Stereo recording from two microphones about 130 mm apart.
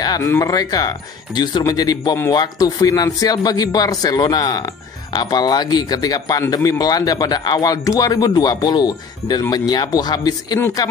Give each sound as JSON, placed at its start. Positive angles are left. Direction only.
{"t": 0.2, "sound": "a man's voice", "side_deg": 25}